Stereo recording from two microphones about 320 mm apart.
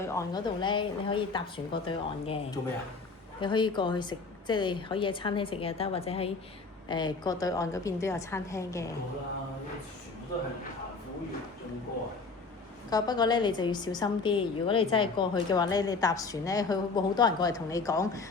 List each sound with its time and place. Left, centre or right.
0.1 s a woman's voice: centre
3.4 s a woman's voice: centre
12.9 s a woman's voice: centre